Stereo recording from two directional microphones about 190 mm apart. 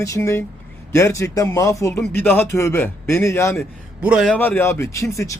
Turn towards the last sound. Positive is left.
turn(degrees=15)  # may be behind; listen again after turning